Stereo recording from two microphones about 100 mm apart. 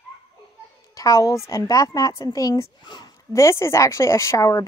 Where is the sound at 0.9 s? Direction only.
35° left (ahead or behind).